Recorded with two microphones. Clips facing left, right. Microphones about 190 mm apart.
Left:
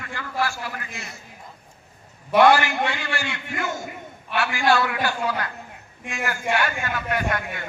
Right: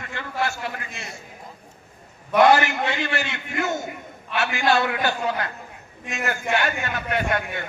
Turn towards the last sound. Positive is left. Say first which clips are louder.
# right 1 dB
turn(degrees=-25)  # may be behind; listen again after turning